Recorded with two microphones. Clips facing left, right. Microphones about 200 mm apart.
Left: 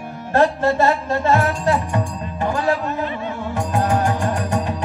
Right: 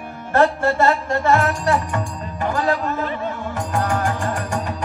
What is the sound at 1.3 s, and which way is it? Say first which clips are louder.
Music: even; 20° left (ahead or behind).